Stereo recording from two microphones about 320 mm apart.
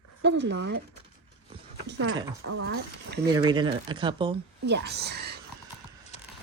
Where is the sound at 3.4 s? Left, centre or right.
Centre.